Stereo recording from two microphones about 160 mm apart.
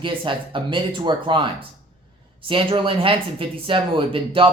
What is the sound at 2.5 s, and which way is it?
Speech, 35° right (ahead or behind).